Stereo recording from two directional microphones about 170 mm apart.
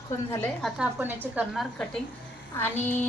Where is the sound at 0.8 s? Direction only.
10° right (ahead or behind).